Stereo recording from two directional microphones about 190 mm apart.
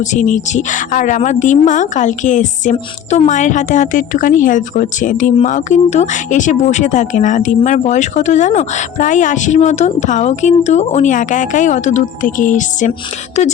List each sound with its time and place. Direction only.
0.0 s a woman's voice: 40° left (ahead or behind)